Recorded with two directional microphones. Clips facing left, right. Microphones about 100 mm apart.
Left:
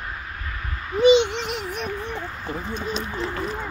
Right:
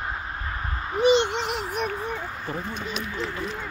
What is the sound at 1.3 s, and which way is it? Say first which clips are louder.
Child singing: right 1 dB; 50° right (ahead or behind).